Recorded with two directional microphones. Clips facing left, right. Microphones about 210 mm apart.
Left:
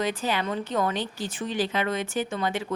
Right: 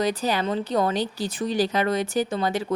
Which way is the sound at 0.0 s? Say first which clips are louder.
Right 3 dB; 40° right (ahead or behind).